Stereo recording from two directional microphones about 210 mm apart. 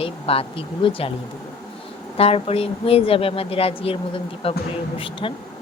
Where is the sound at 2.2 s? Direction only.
30° left (ahead or behind).